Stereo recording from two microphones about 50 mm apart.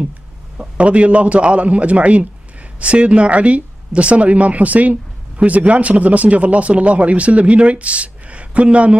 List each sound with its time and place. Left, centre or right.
0.6 s speech: right